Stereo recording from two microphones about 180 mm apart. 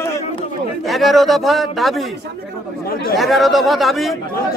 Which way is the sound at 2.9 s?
55° left (ahead or behind).